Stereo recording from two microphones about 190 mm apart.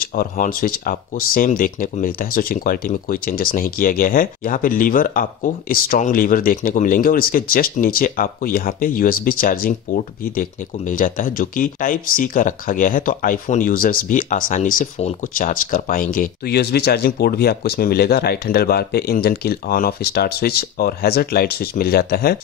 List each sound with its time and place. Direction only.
0.0 s speech: 45° left (ahead or behind)